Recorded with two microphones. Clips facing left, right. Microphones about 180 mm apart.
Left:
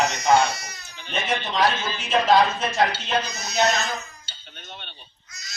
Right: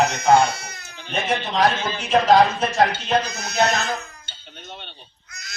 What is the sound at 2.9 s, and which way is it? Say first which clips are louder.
Speech: right 4 dB; 55° right (ahead or behind).